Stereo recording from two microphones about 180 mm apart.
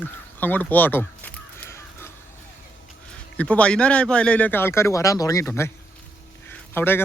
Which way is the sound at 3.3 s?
5° left (ahead or behind).